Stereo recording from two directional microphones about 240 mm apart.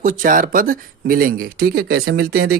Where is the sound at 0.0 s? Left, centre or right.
Right.